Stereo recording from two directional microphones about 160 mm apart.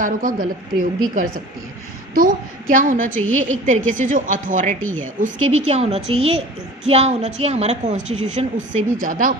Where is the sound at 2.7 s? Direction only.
55° right (ahead or behind).